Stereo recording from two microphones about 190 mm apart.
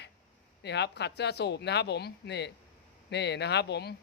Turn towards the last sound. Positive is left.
turn(degrees=60)  # may be behind; listen again after turning